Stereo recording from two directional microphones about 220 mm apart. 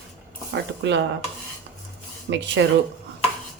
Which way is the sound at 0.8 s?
55° right (ahead or behind).